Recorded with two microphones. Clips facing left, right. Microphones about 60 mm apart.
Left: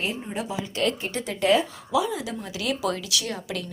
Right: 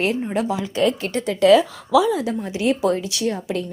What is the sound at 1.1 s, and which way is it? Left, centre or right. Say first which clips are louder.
Speech: right 7 dB; right.